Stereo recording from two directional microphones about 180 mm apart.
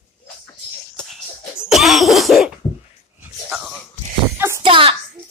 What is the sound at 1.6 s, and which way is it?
Cough, centre (ahead or behind).